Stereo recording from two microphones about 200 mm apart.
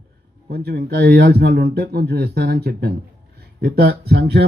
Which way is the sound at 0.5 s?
50° right (ahead or behind).